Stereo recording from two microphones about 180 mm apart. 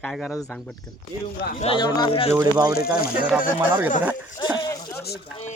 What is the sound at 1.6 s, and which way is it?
Speech, 30° left (ahead or behind).